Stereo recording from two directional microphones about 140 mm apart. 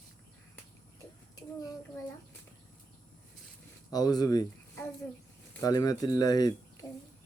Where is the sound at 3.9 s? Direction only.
30° left (ahead or behind).